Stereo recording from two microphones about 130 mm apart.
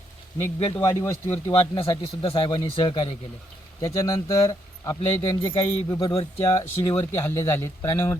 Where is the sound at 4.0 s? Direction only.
25° left (ahead or behind).